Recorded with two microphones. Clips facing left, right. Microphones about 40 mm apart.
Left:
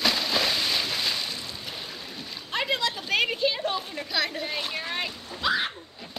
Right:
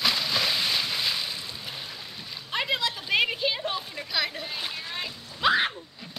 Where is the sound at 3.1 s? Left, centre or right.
Centre.